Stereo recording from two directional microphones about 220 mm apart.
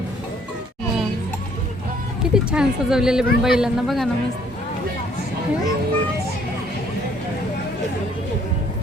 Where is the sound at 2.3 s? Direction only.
5° right (ahead or behind).